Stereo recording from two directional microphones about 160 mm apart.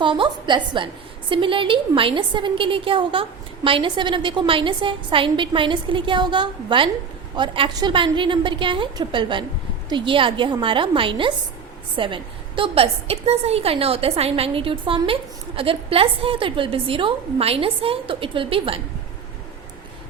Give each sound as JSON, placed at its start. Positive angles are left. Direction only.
{"t": 0.0, "sound": "a woman's voice", "side_deg": -30}